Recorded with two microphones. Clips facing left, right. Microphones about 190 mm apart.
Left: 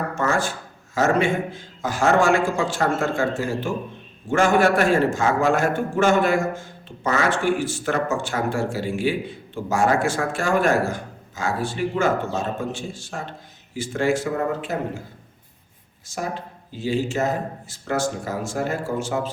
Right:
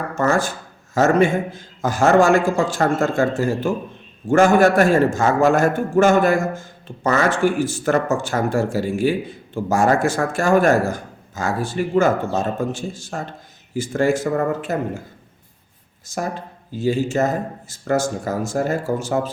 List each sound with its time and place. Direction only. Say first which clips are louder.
0.2 s a man's voice: right 5 dB; 40° right (ahead or behind)
16.1 s a man's voice: right 3 dB; 45° right (ahead or behind)